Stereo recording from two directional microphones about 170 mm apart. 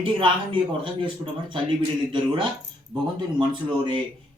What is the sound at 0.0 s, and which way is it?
Speech, 30° right (ahead or behind).